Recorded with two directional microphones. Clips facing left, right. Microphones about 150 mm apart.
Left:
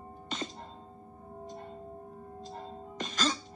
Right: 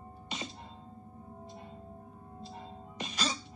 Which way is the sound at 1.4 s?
45° left (ahead or behind).